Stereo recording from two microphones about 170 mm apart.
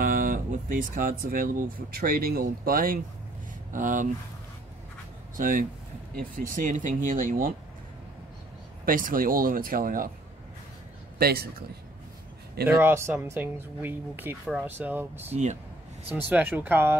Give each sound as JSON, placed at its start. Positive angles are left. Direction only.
{"t": 0.0, "sound": "speech", "side_deg": -55}
{"t": 5.4, "sound": "speech", "side_deg": -50}
{"t": 8.8, "sound": "speech", "side_deg": -55}
{"t": 11.1, "sound": "speech", "side_deg": -65}
{"t": 12.6, "sound": "speech", "side_deg": -15}
{"t": 15.2, "sound": "speech", "side_deg": -40}
{"t": 16.1, "sound": "speech", "side_deg": -10}